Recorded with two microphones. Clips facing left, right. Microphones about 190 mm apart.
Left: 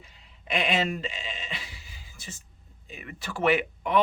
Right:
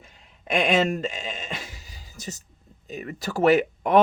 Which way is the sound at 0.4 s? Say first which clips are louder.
Right 6 dB; 45° right (ahead or behind).